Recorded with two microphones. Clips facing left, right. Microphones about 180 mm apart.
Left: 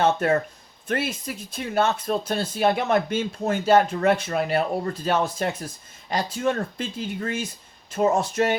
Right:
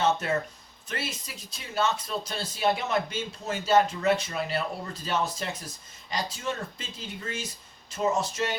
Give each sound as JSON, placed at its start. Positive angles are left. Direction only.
{"t": 0.0, "sound": "speech", "side_deg": 55}